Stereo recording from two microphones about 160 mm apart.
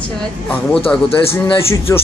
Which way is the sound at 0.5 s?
10° left (ahead or behind).